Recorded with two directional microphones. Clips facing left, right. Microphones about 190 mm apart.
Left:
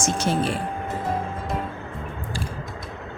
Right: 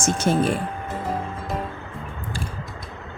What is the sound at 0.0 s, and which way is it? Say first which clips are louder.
Speech: right 2 dB; 50° right (ahead or behind).